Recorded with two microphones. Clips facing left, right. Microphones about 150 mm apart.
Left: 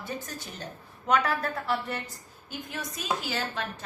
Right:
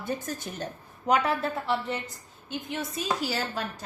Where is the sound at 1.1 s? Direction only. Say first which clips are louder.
Right 1 dB; 25° right (ahead or behind).